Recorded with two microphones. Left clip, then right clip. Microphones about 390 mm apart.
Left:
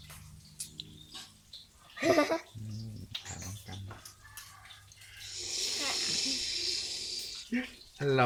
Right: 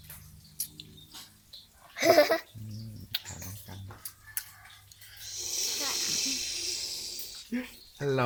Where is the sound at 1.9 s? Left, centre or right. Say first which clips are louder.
Right 5 dB; right.